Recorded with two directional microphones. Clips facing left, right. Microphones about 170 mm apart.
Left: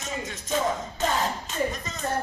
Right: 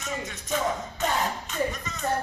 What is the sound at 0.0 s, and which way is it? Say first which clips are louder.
Speech: even; 30° left (ahead or behind).